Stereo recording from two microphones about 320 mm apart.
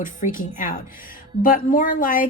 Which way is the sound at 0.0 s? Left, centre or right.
Left.